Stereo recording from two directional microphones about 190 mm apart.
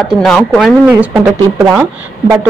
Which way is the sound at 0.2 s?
Centre (ahead or behind).